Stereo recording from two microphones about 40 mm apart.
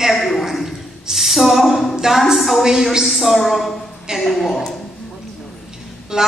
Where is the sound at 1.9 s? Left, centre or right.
Centre.